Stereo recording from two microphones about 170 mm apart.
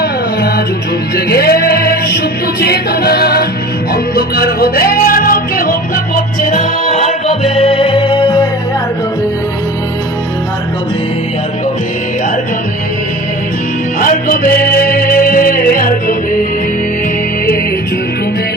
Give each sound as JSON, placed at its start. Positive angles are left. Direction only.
{"t": 0.0, "sound": "music", "side_deg": 65}
{"t": 14.0, "sound": "music", "side_deg": 55}